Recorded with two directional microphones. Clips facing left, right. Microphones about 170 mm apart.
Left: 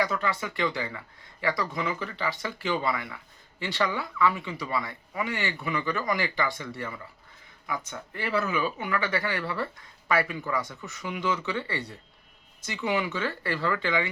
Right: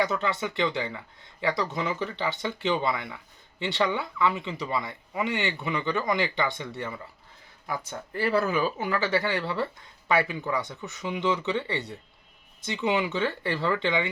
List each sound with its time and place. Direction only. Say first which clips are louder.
0.0 s speech: right 1 dB; 25° right (ahead or behind)
7.7 s speech: right 1 dB; 35° right (ahead or behind)